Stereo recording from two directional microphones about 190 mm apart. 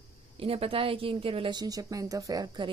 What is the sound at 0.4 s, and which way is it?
A woman's voice, 30° right (ahead or behind).